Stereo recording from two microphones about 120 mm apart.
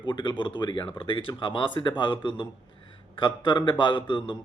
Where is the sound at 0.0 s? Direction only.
40° left (ahead or behind).